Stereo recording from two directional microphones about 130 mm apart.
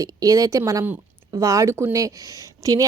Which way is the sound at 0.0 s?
25° right (ahead or behind).